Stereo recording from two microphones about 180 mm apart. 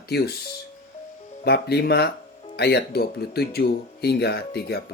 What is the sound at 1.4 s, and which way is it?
Speech, 65° left (ahead or behind).